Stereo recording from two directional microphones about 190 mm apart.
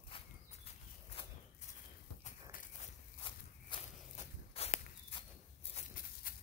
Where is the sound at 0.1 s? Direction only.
25° left (ahead or behind).